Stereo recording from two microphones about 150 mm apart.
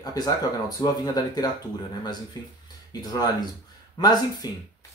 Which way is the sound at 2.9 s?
25° left (ahead or behind).